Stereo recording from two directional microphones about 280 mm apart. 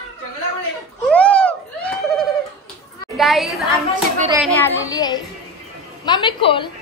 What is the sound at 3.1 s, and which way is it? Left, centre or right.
A child's voice, centre.